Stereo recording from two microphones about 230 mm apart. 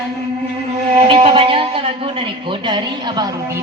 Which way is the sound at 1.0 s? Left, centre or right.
Right.